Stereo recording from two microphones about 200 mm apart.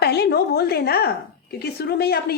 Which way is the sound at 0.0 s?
55° left (ahead or behind).